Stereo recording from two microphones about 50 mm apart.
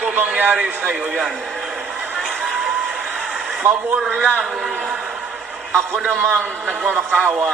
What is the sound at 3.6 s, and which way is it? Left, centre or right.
Speech, right.